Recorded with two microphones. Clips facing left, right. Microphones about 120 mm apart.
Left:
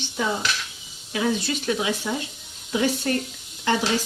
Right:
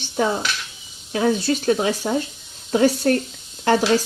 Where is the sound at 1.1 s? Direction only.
40° right (ahead or behind).